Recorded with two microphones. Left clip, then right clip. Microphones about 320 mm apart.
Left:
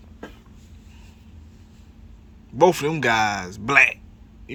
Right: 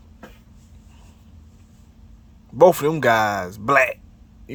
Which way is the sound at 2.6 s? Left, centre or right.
Right.